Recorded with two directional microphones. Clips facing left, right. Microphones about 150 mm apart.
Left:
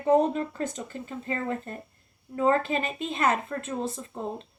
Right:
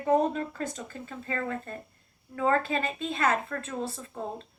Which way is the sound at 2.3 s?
20° left (ahead or behind).